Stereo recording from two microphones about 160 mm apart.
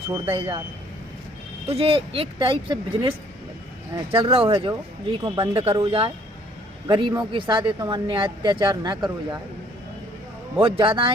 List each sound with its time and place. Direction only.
0.3 s speech: 35° right (ahead or behind)
1.6 s speech: 40° right (ahead or behind)
10.6 s speech: 30° right (ahead or behind)